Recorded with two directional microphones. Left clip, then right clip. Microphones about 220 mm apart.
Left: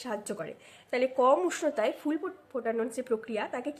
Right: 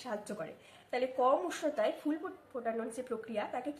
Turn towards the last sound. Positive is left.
turn(degrees=50)  # may be behind; listen again after turning